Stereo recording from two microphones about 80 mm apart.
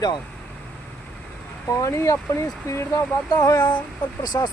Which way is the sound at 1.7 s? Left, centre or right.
Left.